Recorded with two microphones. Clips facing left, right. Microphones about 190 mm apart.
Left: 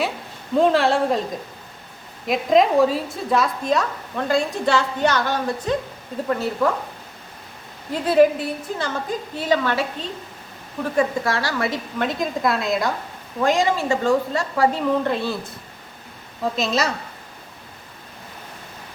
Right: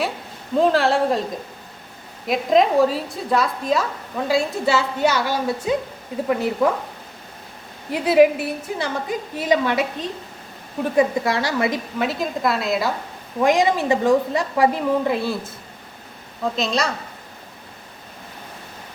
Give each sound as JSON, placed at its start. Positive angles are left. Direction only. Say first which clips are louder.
{"t": 0.5, "sound": "a woman's voice", "louder": "even", "side_deg": 0}
{"t": 2.2, "sound": "a woman's voice", "louder": "even", "side_deg": 0}
{"t": 7.9, "sound": "a woman's voice", "louder": "right 1 dB", "side_deg": -10}
{"t": 11.9, "sound": "a woman's voice", "louder": "even", "side_deg": -5}
{"t": 13.4, "sound": "a woman's voice", "louder": "right 2 dB", "side_deg": -15}
{"t": 16.4, "sound": "a woman's voice", "louder": "even", "side_deg": 5}